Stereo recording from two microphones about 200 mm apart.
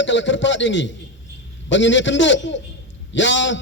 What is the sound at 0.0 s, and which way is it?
A man's voice, 65° left (ahead or behind).